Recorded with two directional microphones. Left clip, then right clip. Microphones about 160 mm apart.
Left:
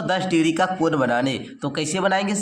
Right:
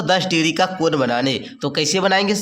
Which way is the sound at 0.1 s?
20° right (ahead or behind).